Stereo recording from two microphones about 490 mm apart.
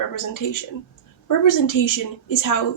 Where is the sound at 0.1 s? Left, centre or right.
Left.